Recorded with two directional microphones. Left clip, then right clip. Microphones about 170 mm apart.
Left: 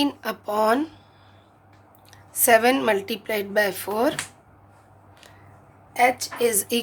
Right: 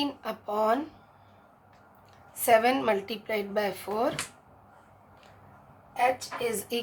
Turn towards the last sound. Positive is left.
turn(degrees=55)  # may be behind; listen again after turning